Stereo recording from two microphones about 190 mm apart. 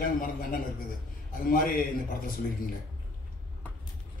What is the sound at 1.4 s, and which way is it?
Speech, 50° left (ahead or behind).